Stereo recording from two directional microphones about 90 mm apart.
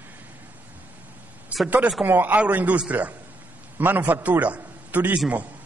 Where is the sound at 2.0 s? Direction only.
20° right (ahead or behind).